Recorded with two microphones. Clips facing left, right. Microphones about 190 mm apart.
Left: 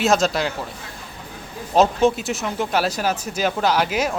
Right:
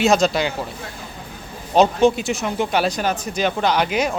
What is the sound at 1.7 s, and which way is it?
Speech, centre (ahead or behind).